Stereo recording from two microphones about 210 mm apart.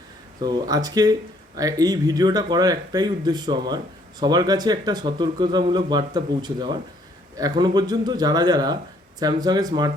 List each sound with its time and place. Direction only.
0.4 s speech: 20° right (ahead or behind)